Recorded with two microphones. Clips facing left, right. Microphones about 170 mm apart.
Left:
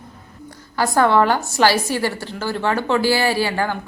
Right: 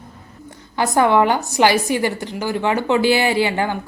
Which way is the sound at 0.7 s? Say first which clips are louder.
Right 1 dB; 20° right (ahead or behind).